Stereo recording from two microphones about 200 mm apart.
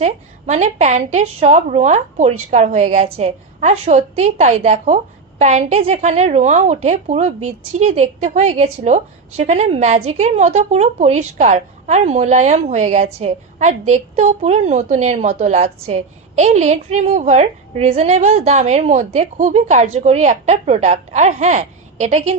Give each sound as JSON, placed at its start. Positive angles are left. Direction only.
{"t": 0.0, "sound": "a woman's voice", "side_deg": -35}